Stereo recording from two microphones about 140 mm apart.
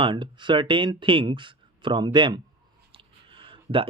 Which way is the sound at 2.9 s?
40° right (ahead or behind).